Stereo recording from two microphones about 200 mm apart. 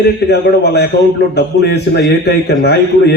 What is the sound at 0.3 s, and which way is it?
A man's voice, 55° left (ahead or behind).